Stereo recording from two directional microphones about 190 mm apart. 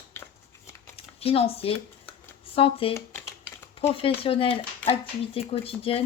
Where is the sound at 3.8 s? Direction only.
30° left (ahead or behind).